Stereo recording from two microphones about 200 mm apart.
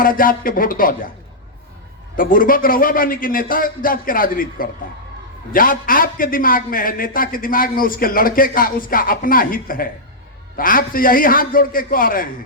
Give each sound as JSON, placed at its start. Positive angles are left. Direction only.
{"t": 0.0, "sound": "a man's voice", "side_deg": 45}
{"t": 2.1, "sound": "a man's voice", "side_deg": 45}